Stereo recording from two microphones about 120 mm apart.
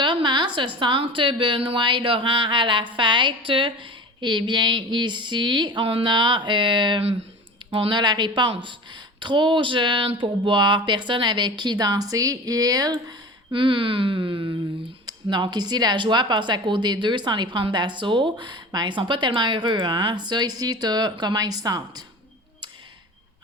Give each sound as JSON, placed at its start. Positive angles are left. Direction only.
{"t": 0.0, "sound": "a woman's voice", "side_deg": -40}